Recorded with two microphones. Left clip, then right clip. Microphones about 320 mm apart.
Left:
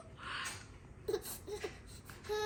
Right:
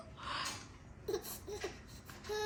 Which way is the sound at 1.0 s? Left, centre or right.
Centre.